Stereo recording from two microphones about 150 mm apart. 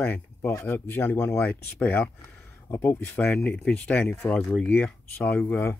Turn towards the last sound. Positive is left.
turn(degrees=5)  # may be behind; listen again after turning